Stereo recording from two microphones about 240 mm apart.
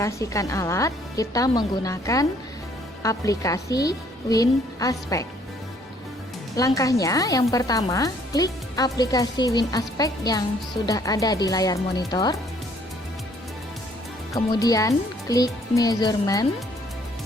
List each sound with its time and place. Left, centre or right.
0.0 s speech: centre
6.6 s speech: centre
14.3 s speech: centre